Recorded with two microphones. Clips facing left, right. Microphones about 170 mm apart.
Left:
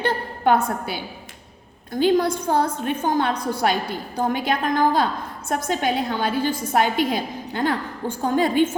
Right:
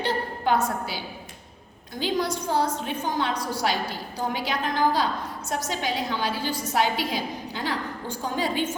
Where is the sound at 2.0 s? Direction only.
55° left (ahead or behind).